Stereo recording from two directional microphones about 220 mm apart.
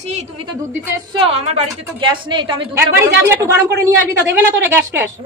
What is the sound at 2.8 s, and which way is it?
Speech, 10° right (ahead or behind).